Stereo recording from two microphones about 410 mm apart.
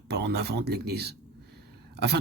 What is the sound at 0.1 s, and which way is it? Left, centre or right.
Speech, right.